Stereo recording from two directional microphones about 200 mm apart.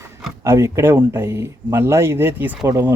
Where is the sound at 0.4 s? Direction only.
15° right (ahead or behind).